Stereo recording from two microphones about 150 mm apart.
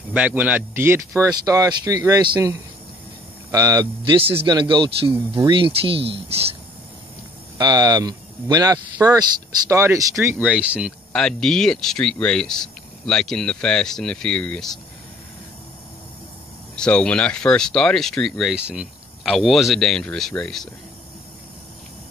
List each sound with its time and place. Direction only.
0.1 s speech: 10° right (ahead or behind)
3.5 s speech: 25° right (ahead or behind)
7.5 s speech: 25° right (ahead or behind)
10.4 s speech: 10° right (ahead or behind)
11.1 s speech: 5° left (ahead or behind)
16.7 s speech: 5° left (ahead or behind)